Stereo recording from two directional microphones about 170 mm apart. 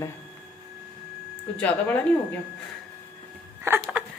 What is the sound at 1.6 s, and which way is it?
Speech, 10° left (ahead or behind).